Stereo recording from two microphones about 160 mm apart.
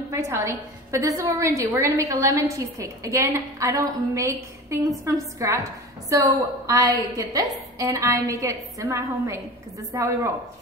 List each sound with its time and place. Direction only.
0.1 s a woman's voice: 15° right (ahead or behind)